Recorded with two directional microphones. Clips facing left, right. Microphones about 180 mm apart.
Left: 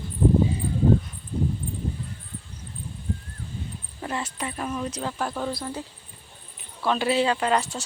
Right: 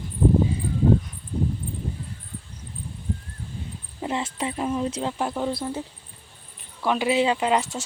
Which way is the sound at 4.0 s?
20° right (ahead or behind).